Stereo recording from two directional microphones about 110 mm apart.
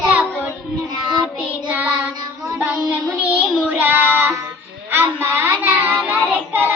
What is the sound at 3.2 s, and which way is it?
Child singing, 15° right (ahead or behind).